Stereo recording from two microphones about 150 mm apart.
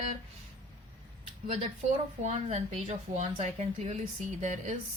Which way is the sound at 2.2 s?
50° right (ahead or behind).